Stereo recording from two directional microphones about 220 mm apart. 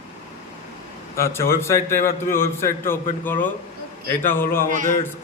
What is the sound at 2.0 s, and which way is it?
Speech, 40° left (ahead or behind).